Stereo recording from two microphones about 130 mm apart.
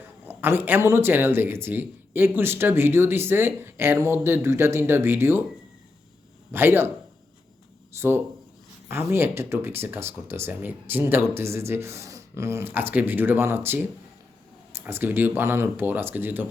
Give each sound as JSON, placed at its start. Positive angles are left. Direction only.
{"t": 0.4, "sound": "speech", "side_deg": -15}
{"t": 6.5, "sound": "speech", "side_deg": -20}
{"t": 7.9, "sound": "speech", "side_deg": -20}